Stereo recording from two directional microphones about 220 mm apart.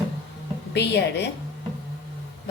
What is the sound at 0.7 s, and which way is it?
Speech, 50° left (ahead or behind).